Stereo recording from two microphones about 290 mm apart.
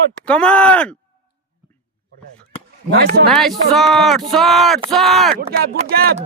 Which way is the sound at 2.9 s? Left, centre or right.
Right.